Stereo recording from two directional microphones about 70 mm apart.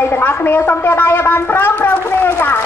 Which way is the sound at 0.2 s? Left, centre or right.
Left.